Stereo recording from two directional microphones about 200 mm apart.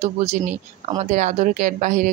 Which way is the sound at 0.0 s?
30° right (ahead or behind).